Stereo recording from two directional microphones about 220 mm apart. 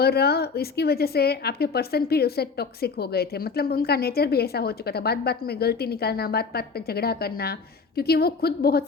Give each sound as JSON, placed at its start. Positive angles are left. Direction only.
{"t": 0.0, "sound": "a woman's voice", "side_deg": 45}